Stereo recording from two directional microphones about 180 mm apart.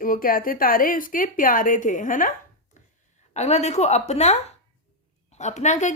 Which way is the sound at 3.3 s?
40° left (ahead or behind).